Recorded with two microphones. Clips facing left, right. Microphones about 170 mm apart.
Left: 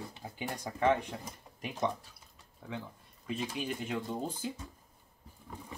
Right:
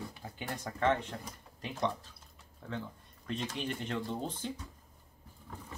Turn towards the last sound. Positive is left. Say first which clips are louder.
# left 1 dB
turn(degrees=15)  # may be behind; listen again after turning